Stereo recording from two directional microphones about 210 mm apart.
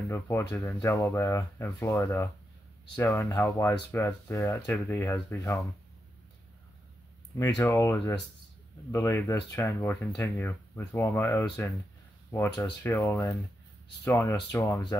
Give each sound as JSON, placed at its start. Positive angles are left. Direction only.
{"t": 0.1, "sound": "speech", "side_deg": 10}
{"t": 7.3, "sound": "speech", "side_deg": 15}